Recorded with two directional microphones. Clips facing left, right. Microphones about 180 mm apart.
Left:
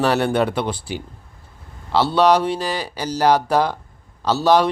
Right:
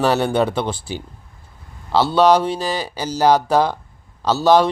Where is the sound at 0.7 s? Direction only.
30° right (ahead or behind).